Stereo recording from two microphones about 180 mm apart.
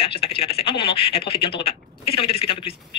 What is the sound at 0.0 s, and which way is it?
Speech, 30° left (ahead or behind).